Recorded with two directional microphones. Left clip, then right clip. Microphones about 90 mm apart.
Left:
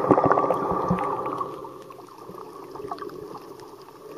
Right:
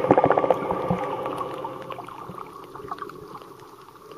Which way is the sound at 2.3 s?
10° right (ahead or behind).